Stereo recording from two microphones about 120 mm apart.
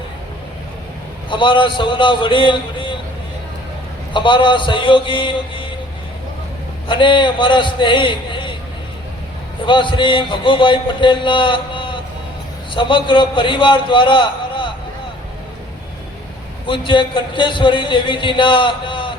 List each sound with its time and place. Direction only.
1.3 s a man's voice: 45° left (ahead or behind)
4.1 s a man's voice: 40° left (ahead or behind)
6.8 s a man's voice: 40° left (ahead or behind)
9.6 s a man's voice: 45° left (ahead or behind)
16.6 s a man's voice: 45° left (ahead or behind)